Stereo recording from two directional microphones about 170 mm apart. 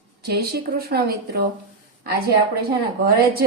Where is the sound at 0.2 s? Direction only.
70° right (ahead or behind).